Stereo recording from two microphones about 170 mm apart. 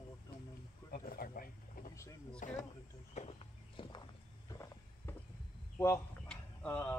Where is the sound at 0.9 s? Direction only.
60° left (ahead or behind).